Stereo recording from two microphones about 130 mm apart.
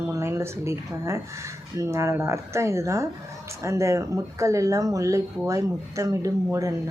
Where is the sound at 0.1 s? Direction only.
20° right (ahead or behind).